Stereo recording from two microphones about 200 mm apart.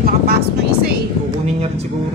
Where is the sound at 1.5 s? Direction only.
30° right (ahead or behind).